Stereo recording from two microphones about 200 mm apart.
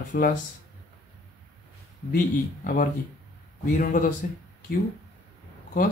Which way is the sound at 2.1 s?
45° left (ahead or behind).